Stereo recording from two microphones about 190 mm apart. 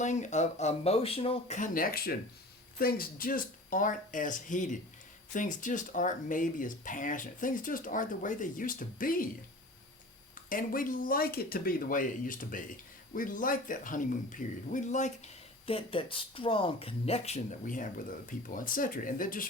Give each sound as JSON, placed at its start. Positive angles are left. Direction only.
{"t": 0.0, "sound": "speech", "side_deg": 40}
{"t": 1.5, "sound": "speech", "side_deg": 45}
{"t": 10.5, "sound": "speech", "side_deg": 45}